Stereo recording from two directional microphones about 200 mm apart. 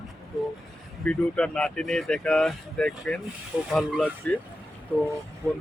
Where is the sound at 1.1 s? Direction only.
5° left (ahead or behind).